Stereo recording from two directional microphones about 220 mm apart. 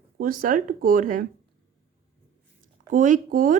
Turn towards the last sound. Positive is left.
turn(degrees=-40)  # may be behind; listen again after turning